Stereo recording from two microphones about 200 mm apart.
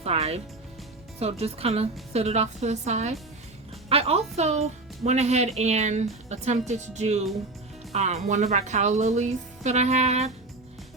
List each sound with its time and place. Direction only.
0.0 s a woman's voice: 30° right (ahead or behind)